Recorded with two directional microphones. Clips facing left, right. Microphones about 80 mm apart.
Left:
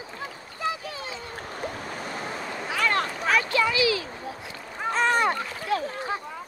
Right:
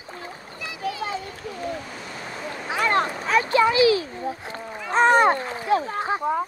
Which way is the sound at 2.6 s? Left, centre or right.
Right.